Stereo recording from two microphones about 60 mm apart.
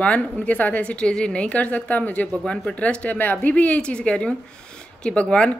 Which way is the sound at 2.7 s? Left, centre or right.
Left.